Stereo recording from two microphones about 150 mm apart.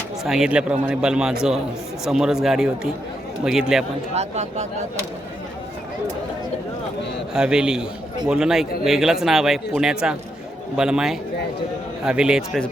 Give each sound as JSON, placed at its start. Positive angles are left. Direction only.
{"t": 0.3, "sound": "a man's voice", "side_deg": -5}
{"t": 4.1, "sound": "speech", "side_deg": -45}
{"t": 7.3, "sound": "a man's voice", "side_deg": -5}